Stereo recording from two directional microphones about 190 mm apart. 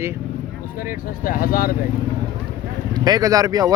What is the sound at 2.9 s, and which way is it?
Speech, 20° right (ahead or behind).